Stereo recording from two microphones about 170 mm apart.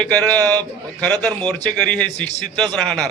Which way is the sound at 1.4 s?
5° left (ahead or behind).